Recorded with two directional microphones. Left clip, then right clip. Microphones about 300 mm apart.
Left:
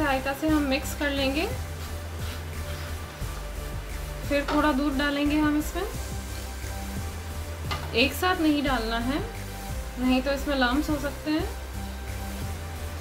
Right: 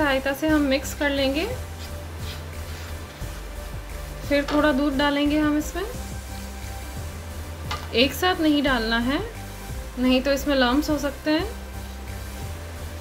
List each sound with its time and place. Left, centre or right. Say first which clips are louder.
0.0 s a woman's voice: right 4 dB; centre
4.3 s a woman's voice: right 3 dB; centre
7.6 s a woman's voice: right 3 dB; centre